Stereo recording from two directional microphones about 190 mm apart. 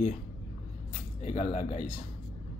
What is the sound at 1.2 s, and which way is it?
Speech, 35° left (ahead or behind).